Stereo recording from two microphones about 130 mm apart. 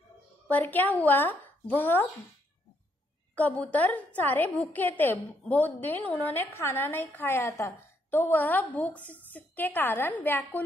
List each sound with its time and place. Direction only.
0.5 s a woman's voice: 15° left (ahead or behind)
3.3 s a woman's voice: 10° left (ahead or behind)